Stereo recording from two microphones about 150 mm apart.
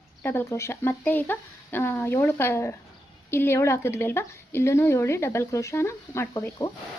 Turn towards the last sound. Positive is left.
turn(degrees=20)  # may be behind; listen again after turning